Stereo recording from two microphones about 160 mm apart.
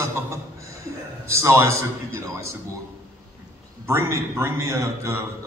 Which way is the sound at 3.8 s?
15° right (ahead or behind).